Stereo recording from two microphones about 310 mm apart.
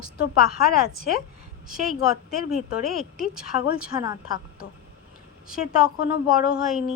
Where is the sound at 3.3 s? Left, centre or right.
Centre.